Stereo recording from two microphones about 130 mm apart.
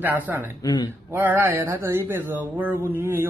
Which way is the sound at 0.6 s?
30° left (ahead or behind).